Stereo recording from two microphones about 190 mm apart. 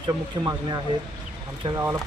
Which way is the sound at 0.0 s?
20° right (ahead or behind).